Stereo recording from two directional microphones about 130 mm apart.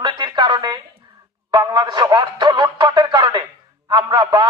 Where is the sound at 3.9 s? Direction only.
35° right (ahead or behind).